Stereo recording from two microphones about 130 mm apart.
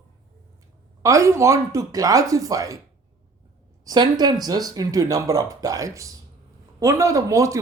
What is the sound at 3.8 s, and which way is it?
Speech, 30° right (ahead or behind).